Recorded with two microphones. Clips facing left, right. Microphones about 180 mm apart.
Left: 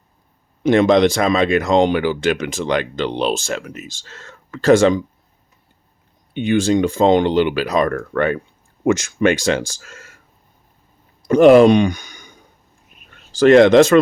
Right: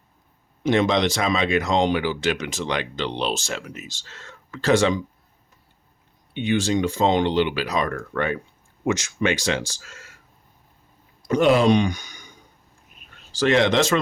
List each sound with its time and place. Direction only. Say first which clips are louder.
0.6 s speech: left 7 dB; 50° left (ahead or behind)
6.3 s speech: left 6 dB; 50° left (ahead or behind)
11.3 s speech: left 8 dB; 55° left (ahead or behind)
13.3 s speech: left 10 dB; 50° left (ahead or behind)